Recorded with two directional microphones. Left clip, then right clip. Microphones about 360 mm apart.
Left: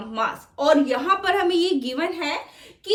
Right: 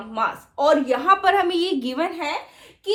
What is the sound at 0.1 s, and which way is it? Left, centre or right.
A woman's voice, centre.